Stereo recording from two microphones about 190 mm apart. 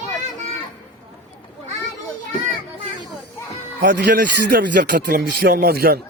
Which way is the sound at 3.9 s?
60° right (ahead or behind).